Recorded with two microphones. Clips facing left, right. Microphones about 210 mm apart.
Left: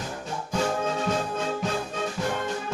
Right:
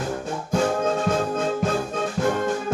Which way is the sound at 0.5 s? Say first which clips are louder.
Right 5 dB; 50° right (ahead or behind).